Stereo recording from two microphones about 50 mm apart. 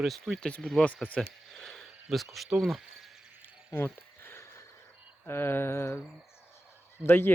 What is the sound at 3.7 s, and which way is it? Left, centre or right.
Cricket, left.